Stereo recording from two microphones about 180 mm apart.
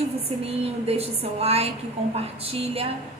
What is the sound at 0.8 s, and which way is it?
Speech, 35° right (ahead or behind).